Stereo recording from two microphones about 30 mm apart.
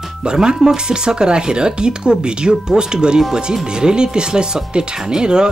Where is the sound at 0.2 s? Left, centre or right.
Right.